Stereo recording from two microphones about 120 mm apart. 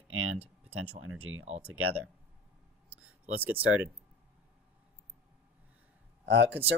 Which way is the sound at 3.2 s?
15° right (ahead or behind).